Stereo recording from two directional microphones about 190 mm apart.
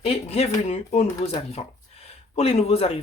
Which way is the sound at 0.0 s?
30° left (ahead or behind).